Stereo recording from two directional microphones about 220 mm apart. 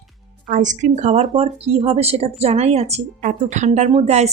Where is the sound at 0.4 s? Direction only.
35° right (ahead or behind).